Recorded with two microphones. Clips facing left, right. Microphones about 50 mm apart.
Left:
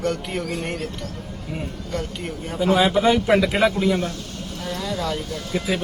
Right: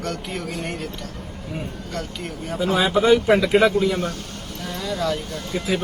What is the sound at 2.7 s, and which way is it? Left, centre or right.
Speech, centre.